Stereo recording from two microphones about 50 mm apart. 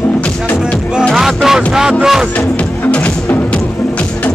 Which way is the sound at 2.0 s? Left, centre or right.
Centre.